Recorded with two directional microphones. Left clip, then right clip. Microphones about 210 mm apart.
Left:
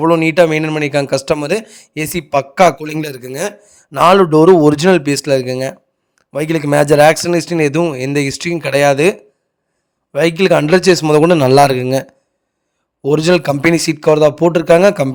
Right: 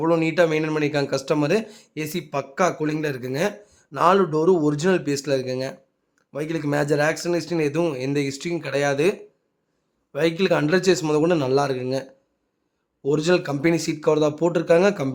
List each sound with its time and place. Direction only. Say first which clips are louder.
0.0 s speech: left 9 dB; 35° left (ahead or behind)